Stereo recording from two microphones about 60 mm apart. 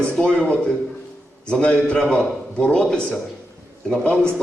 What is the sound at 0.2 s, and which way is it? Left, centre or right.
A man's voice, centre.